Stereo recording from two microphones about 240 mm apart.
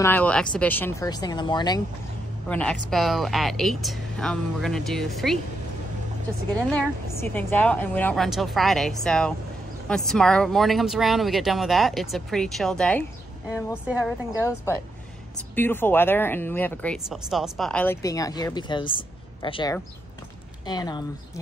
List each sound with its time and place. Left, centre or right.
0.0 s speech: centre
2.4 s speech: centre
6.5 s speech: centre
14.4 s speech: centre